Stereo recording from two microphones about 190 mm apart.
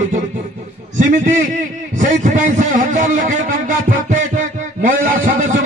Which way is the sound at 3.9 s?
40° right (ahead or behind).